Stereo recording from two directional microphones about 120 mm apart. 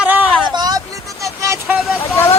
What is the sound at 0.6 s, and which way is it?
Vehicle, 30° right (ahead or behind).